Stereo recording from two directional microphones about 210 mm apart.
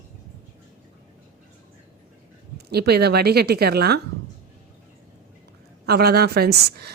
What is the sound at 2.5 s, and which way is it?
A woman's voice, 50° right (ahead or behind).